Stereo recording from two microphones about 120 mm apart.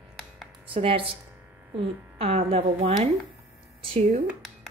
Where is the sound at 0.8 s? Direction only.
50° right (ahead or behind).